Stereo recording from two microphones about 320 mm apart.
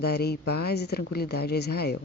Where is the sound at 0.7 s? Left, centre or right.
Left.